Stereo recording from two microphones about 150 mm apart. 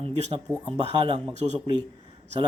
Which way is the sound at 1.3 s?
50° right (ahead or behind).